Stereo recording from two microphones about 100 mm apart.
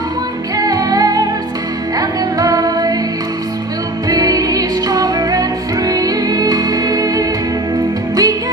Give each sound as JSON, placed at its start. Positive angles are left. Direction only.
{"t": 0.5, "sound": "music", "side_deg": -35}
{"t": 4.1, "sound": "music", "side_deg": -40}